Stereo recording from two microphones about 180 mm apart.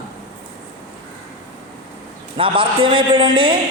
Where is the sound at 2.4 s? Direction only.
30° right (ahead or behind).